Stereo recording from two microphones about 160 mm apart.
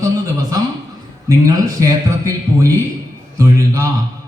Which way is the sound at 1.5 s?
20° right (ahead or behind).